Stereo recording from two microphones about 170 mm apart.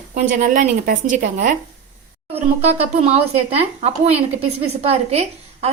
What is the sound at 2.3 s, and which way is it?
A woman's voice, 40° right (ahead or behind).